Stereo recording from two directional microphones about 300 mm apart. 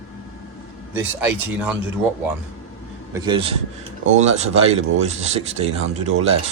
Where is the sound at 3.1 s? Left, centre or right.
Centre.